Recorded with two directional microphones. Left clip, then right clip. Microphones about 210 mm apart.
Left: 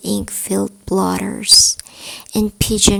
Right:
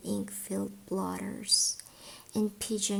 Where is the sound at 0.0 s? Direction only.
35° left (ahead or behind).